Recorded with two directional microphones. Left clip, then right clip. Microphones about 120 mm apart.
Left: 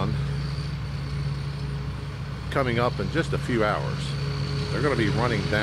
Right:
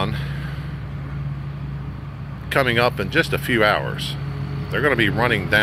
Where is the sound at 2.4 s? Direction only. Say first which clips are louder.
Right 7 dB; 25° right (ahead or behind).